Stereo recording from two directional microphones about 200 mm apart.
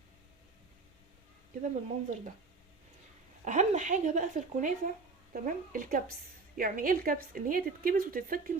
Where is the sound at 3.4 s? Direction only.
40° right (ahead or behind).